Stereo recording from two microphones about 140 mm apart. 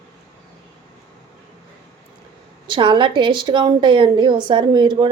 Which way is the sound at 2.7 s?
35° right (ahead or behind).